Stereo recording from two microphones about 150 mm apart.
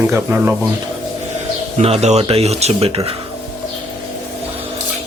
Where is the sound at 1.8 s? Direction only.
45° right (ahead or behind).